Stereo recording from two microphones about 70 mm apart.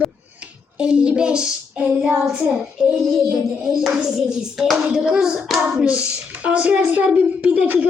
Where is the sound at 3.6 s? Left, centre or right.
Centre.